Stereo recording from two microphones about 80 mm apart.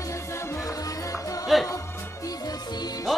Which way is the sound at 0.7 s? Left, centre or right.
Left.